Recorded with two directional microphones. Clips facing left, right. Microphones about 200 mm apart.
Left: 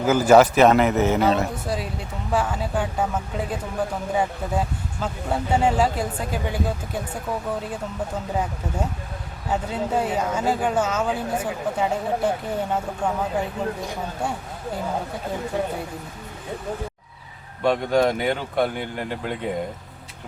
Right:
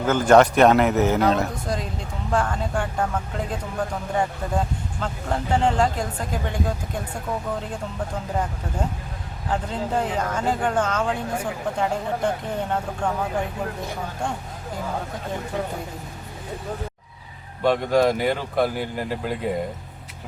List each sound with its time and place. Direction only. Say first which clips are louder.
0.0 s speech: left 1 dB; 5° left (ahead or behind)
8.4 s speech: even; 5° left (ahead or behind)
17.6 s speech: right 1 dB; centre (ahead or behind)